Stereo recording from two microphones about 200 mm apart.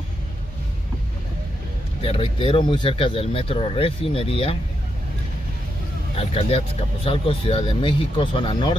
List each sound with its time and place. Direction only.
2.0 s speech: 30° left (ahead or behind)
6.1 s speech: 30° left (ahead or behind)